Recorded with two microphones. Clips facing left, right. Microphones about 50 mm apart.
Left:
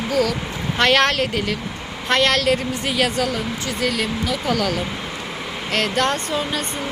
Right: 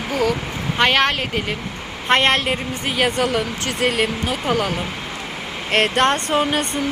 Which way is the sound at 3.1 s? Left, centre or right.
Right.